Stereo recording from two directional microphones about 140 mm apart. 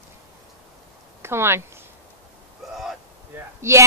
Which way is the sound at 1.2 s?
15° right (ahead or behind).